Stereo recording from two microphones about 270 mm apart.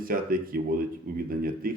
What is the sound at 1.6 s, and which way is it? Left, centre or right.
Speech, right.